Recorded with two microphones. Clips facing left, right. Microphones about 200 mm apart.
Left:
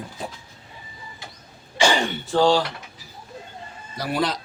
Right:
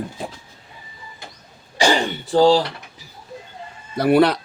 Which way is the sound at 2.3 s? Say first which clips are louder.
Right 4 dB; 35° right (ahead or behind).